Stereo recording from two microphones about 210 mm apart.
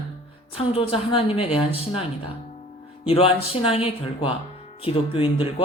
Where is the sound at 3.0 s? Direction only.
25° left (ahead or behind).